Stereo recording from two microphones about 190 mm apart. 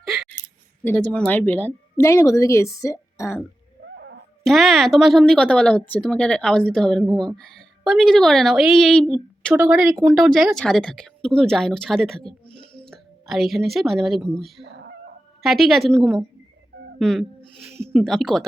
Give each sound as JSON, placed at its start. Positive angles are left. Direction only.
{"t": 0.0, "sound": "scissors", "side_deg": 0}
{"t": 1.1, "sound": "speech", "side_deg": 5}
{"t": 4.4, "sound": "speech", "side_deg": 0}
{"t": 9.5, "sound": "speech", "side_deg": -15}
{"t": 10.2, "sound": "a woman's voice", "side_deg": 0}
{"t": 14.6, "sound": "fowl", "side_deg": -65}
{"t": 15.4, "sound": "speech", "side_deg": 0}